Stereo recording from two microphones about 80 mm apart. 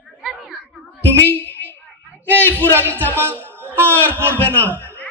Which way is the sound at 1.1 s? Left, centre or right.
Left.